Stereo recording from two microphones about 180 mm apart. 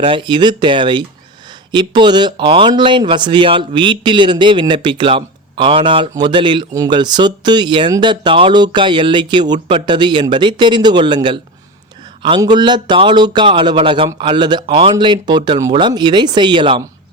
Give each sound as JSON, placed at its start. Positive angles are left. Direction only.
{"t": 0.0, "sound": "speech", "side_deg": -30}